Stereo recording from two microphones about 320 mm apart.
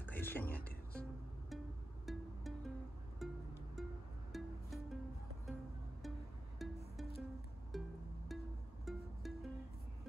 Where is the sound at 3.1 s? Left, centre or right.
Centre.